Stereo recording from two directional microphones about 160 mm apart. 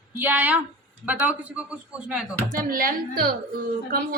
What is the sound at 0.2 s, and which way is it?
A woman's voice, 10° right (ahead or behind).